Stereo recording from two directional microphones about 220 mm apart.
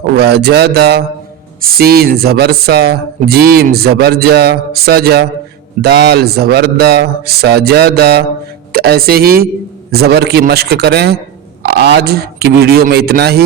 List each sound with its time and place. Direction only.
0.2 s speech: 45° right (ahead or behind)